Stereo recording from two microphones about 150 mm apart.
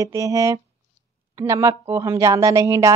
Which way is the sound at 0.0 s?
20° right (ahead or behind).